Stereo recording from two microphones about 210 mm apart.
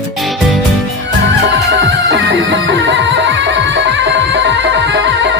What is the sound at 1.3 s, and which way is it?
Music, 60° right (ahead or behind).